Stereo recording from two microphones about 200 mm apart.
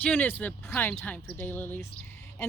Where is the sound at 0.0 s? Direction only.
10° left (ahead or behind).